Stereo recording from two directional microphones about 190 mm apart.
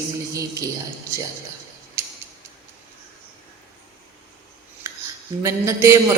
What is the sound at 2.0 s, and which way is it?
Creak, 15° right (ahead or behind).